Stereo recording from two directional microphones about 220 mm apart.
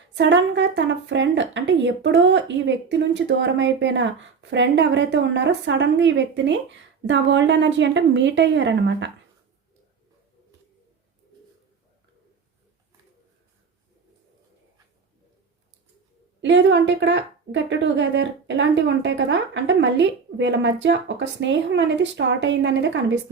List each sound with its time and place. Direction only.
0.1 s a woman's voice: 55° right (ahead or behind)
16.4 s a woman's voice: 55° right (ahead or behind)